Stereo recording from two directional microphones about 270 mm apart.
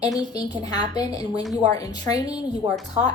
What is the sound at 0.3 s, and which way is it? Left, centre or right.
A woman's voice, centre.